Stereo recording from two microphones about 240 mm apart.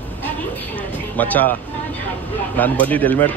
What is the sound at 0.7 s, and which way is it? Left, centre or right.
Speech, centre.